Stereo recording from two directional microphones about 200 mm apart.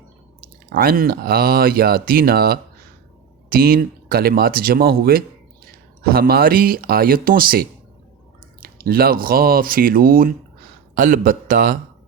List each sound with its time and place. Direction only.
0.7 s speech: 45° right (ahead or behind)